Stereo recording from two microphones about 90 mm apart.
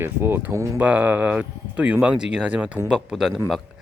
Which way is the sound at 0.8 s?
20° right (ahead or behind).